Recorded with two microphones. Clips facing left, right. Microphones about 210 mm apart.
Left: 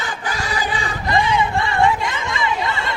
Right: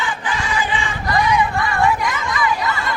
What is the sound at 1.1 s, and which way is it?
Chatter, 25° left (ahead or behind).